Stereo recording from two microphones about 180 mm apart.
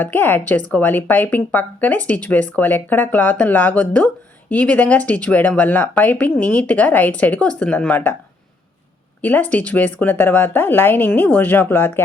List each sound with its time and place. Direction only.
0.0 s speech: 10° left (ahead or behind)
9.2 s speech: 10° left (ahead or behind)